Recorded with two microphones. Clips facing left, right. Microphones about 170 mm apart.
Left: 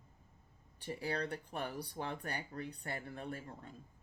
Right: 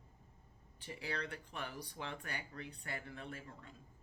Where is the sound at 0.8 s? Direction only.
40° left (ahead or behind).